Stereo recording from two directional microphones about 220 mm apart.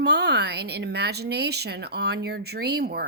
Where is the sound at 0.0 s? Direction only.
50° right (ahead or behind).